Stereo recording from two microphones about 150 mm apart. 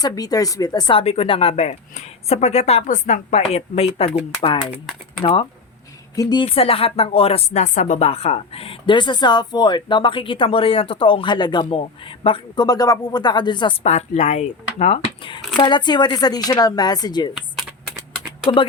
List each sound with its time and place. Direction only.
0.0 s speech: 25° left (ahead or behind)
1.0 s speech: 45° left (ahead or behind)
5.2 s speech: 35° left (ahead or behind)
13.8 s speech: 50° left (ahead or behind); by 17.3 s 30° left (ahead or behind)